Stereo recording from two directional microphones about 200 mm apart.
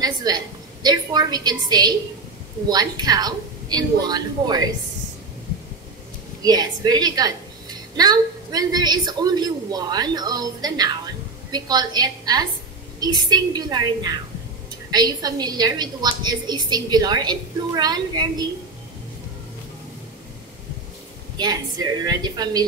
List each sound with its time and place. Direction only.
0.0 s a woman's voice: 20° right (ahead or behind)
6.4 s a woman's voice: 20° right (ahead or behind)
21.4 s a woman's voice: 20° right (ahead or behind)